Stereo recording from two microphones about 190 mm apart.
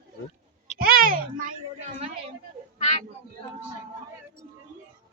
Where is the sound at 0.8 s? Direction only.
50° right (ahead or behind).